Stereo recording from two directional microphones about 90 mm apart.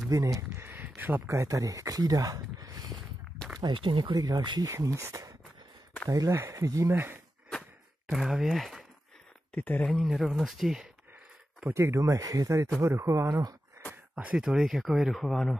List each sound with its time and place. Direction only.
0.1 s a sound: 35° right (ahead or behind)
1.4 s speech: 35° right (ahead or behind)
3.5 s speech: 60° right (ahead or behind)
4.1 s speech: 50° right (ahead or behind)
4.6 s speech: 35° right (ahead or behind)
6.9 s speech: 25° right (ahead or behind)
8.1 s speech: 5° right (ahead or behind)
9.5 s speech: 15° left (ahead or behind)
9.9 s speech: centre (ahead or behind)
11.7 s speech: 30° right (ahead or behind)
14.1 s speech: 10° right (ahead or behind)